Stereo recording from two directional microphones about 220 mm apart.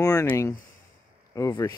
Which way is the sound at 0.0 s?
15° left (ahead or behind).